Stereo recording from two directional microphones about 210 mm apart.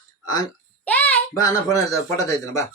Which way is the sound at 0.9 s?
5° left (ahead or behind).